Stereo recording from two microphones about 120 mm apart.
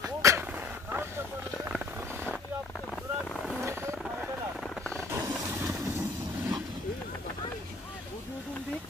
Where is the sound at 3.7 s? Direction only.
20° right (ahead or behind).